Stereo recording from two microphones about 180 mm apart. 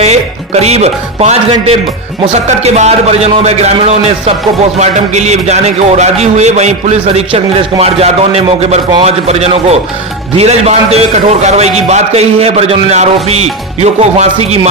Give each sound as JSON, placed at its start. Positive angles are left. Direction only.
{"t": 0.6, "sound": "a man's voice", "side_deg": -35}